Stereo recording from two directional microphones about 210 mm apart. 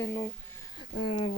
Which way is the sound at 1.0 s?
25° left (ahead or behind).